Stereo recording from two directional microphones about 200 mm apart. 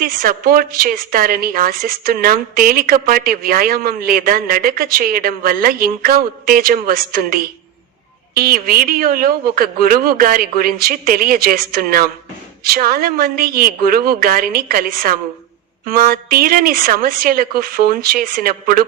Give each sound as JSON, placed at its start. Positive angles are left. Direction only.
{"t": 0.0, "sound": "a woman's voice", "side_deg": -45}